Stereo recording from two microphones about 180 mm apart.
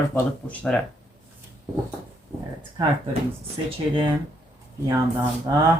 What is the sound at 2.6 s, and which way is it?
Speech, 25° right (ahead or behind).